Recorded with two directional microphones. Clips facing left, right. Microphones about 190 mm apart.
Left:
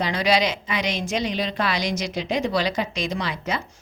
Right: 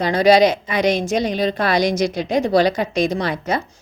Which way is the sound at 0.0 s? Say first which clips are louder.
Right 8 dB; 50° right (ahead or behind).